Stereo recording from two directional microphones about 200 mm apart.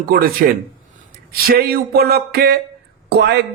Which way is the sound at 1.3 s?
50° right (ahead or behind).